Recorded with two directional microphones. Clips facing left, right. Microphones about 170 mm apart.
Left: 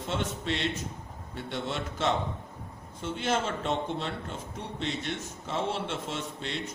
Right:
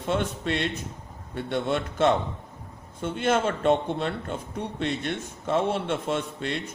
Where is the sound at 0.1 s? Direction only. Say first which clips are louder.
Right 5 dB; 55° right (ahead or behind).